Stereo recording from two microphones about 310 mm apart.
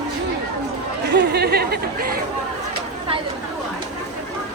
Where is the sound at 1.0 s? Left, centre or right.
Right.